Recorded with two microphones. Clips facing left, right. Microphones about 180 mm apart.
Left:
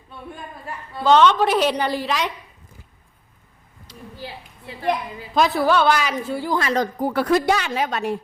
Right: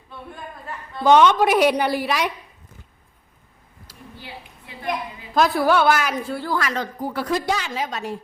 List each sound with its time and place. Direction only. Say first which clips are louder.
1.0 s a woman's voice: right 1 dB; 10° right (ahead or behind)
4.2 s a sound: left 4 dB; 35° left (ahead or behind)
5.3 s a woman's voice: even; centre (ahead or behind)
6.3 s a woman's voice: left 4 dB; 15° left (ahead or behind)
7.0 s speech: left 4 dB; 65° left (ahead or behind)